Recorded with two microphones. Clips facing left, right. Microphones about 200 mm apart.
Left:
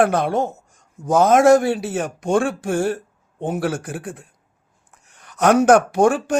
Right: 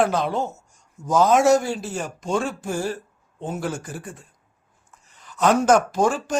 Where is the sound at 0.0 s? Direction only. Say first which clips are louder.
Left 4 dB; 60° left (ahead or behind).